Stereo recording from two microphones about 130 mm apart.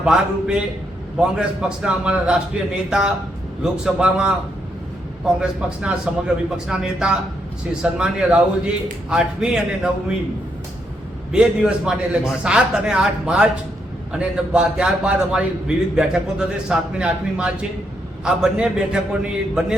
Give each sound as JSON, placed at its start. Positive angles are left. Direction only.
{"t": 0.0, "sound": "a man's voice", "side_deg": -5}
{"t": 5.4, "sound": "a man's voice", "side_deg": -5}
{"t": 11.3, "sound": "a man's voice", "side_deg": -5}